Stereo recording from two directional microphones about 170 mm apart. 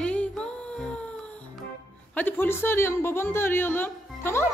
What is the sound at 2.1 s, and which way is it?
A woman's voice, 10° left (ahead or behind).